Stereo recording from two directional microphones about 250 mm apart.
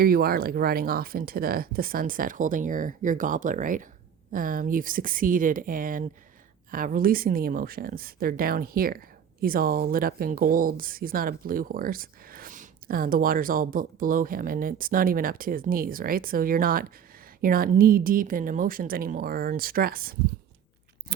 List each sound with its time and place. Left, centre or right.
0.0 s a woman's voice: right